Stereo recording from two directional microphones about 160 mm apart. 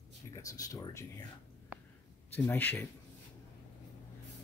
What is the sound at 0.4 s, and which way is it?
Speech, 20° left (ahead or behind).